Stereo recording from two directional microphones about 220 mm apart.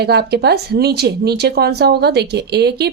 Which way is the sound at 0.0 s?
45° right (ahead or behind).